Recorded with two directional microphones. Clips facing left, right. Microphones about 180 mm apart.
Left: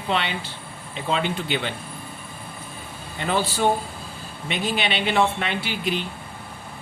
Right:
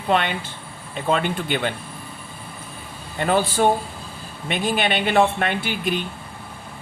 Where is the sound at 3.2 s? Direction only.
50° right (ahead or behind).